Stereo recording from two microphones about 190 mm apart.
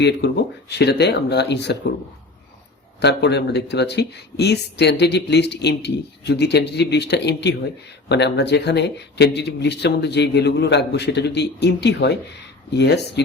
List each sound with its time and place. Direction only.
0.0 s speech: 60° left (ahead or behind)
3.0 s speech: 60° left (ahead or behind)